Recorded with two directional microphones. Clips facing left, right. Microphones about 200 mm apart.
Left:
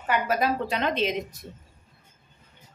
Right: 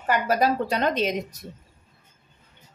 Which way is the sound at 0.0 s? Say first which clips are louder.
Right 3 dB; 40° right (ahead or behind).